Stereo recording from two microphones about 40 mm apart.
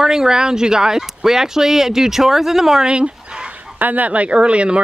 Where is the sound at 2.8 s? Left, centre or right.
Right.